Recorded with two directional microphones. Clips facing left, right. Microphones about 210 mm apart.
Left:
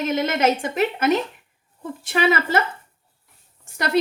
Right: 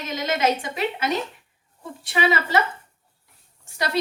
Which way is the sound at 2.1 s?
50° left (ahead or behind).